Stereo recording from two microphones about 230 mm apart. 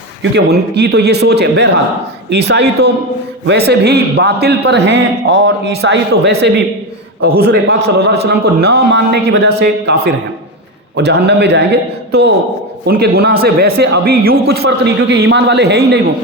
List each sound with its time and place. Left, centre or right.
0.2 s speech: right